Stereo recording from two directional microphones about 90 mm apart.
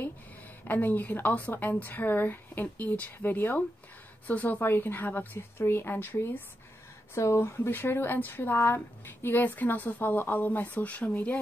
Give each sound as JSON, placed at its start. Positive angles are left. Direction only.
{"t": 0.7, "sound": "speech", "side_deg": 20}